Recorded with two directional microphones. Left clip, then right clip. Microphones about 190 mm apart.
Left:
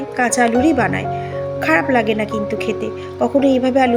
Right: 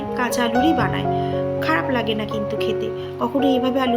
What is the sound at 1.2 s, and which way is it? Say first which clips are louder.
A woman's voice: left 1 dB; 25° left (ahead or behind).